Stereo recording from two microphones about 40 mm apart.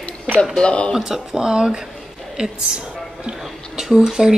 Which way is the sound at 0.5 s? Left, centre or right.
Left.